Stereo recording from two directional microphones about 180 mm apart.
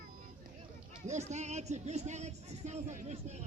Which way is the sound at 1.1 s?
40° right (ahead or behind).